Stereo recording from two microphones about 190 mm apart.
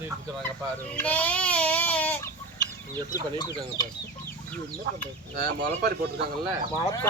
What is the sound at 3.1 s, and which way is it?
Speech, 20° left (ahead or behind).